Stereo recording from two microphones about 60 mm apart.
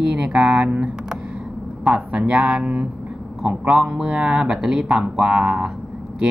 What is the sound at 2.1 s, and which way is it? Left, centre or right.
Speech, right.